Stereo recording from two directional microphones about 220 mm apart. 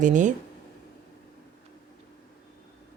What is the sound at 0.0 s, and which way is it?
Speech, 35° right (ahead or behind).